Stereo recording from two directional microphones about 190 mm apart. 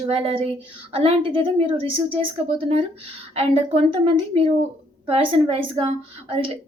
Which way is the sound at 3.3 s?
30° right (ahead or behind).